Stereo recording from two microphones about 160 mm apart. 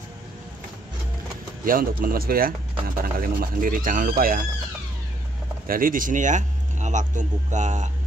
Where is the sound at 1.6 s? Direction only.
60° right (ahead or behind).